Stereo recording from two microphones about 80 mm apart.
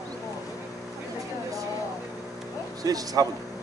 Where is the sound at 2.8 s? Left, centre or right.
Right.